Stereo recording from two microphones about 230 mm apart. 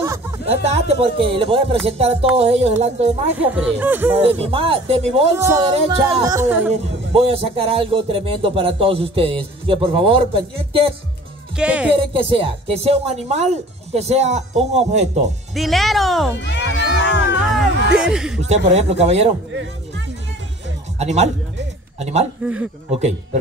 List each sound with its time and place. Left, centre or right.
0.5 s speech: right
3.3 s music: centre
4.2 s speech: right
5.4 s music: centre
6.7 s speech: right
11.5 s speech: centre
12.0 s speech: right
15.5 s speech: centre
16.3 s speech: left
17.9 s speech: centre
18.7 s speech: right
21.0 s speech: right
22.4 s music: centre
22.8 s speech: right